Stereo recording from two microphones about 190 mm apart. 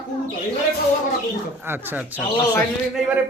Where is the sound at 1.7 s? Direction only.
10° right (ahead or behind).